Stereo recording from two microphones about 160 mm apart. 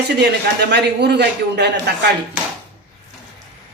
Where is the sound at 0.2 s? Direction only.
90° right.